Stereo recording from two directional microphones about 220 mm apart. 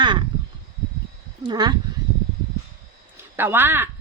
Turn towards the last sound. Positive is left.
turn(degrees=-10)  # may be behind; listen again after turning